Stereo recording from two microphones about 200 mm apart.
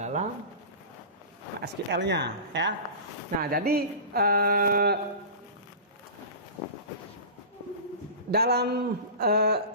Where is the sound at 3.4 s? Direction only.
50° right (ahead or behind).